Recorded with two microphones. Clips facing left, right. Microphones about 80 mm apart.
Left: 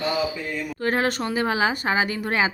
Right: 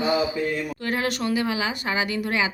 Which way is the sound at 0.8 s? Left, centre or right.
Left.